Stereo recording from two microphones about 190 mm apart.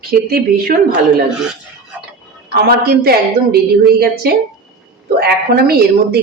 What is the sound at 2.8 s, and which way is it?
A woman's voice, 55° right (ahead or behind).